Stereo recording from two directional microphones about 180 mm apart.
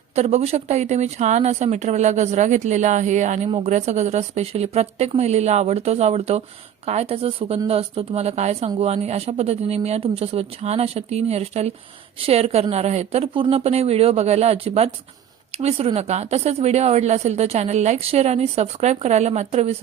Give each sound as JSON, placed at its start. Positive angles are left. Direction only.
{"t": 0.2, "sound": "a woman's voice", "side_deg": -35}